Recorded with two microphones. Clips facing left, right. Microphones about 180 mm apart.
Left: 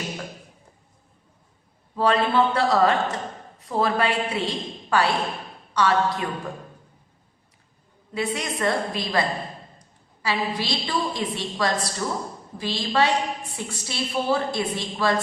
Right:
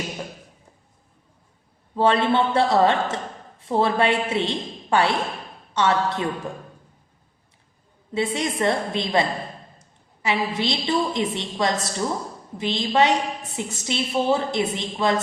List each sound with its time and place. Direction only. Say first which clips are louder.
2.0 s a woman's voice: right 1 dB; 25° right (ahead or behind)
8.1 s a woman's voice: right 3 dB; 25° right (ahead or behind)
10.2 s a woman's voice: right 2 dB; 25° right (ahead or behind)